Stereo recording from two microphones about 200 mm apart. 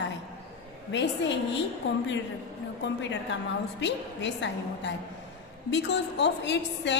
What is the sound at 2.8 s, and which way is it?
A woman's voice, 65° left (ahead or behind).